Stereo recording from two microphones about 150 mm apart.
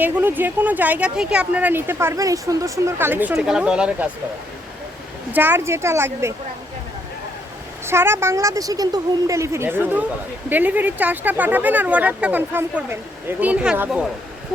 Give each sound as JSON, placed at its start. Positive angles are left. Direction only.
{"t": 0.0, "sound": "speech", "side_deg": -10}
{"t": 5.3, "sound": "speech", "side_deg": -15}
{"t": 7.9, "sound": "speech", "side_deg": -15}